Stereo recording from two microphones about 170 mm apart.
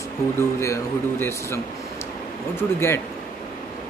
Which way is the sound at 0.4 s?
15° left (ahead or behind).